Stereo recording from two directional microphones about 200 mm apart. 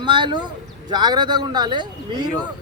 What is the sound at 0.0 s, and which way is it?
Speech, 25° right (ahead or behind).